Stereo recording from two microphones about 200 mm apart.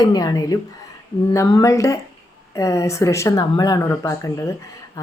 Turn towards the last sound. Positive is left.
turn(degrees=15)  # may be behind; listen again after turning